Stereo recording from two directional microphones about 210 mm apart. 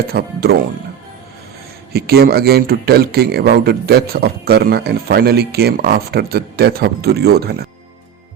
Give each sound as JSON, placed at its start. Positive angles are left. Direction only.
{"t": 0.1, "sound": "speech", "side_deg": -50}
{"t": 1.9, "sound": "speech", "side_deg": -50}